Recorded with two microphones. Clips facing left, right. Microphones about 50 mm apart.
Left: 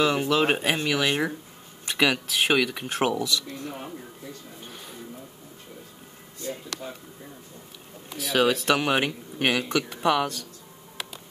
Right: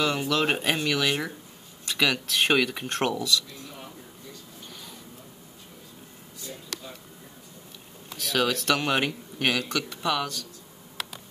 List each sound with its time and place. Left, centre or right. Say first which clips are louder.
0.0 s speech: left 3 dB; centre
2.2 s speech: even; centre
3.2 s speech: even; centre
3.4 s dishes: left 7 dB; left
6.4 s a sound: left 6 dB; left
8.2 s speech: left 3 dB; centre; by 10.5 s left